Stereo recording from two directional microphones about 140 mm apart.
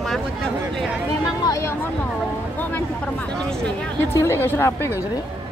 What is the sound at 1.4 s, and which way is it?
Speech, 25° left (ahead or behind).